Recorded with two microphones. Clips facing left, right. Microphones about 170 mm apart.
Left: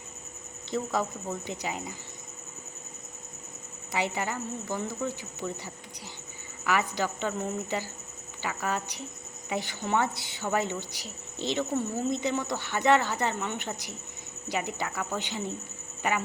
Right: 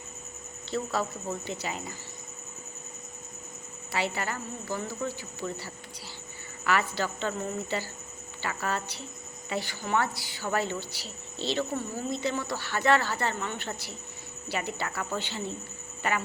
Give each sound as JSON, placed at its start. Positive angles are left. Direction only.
{"t": 0.7, "sound": "speech", "side_deg": 15}
{"t": 3.9, "sound": "speech", "side_deg": 20}